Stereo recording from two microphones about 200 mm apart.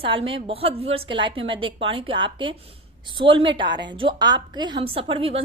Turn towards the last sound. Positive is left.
turn(degrees=-30)  # may be behind; listen again after turning